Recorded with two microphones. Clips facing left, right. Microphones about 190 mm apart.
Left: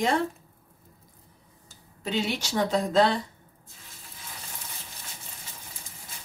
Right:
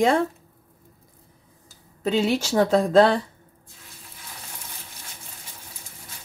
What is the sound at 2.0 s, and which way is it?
Speech, 45° right (ahead or behind).